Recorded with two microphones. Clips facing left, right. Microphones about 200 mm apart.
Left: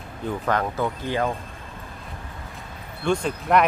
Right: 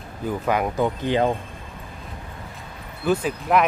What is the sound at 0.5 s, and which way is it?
Speech, 15° right (ahead or behind).